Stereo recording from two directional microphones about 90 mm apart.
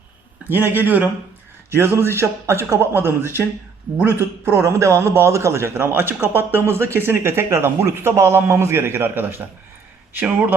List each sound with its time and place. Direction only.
0.4 s a man's voice: 20° right (ahead or behind)